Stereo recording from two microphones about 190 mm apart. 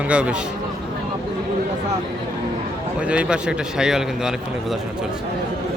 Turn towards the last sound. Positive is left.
turn(degrees=-5)  # may be behind; listen again after turning